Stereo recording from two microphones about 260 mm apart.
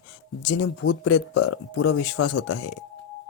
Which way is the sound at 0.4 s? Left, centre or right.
Left.